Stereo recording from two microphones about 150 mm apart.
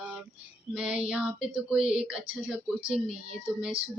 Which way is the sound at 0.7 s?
10° right (ahead or behind).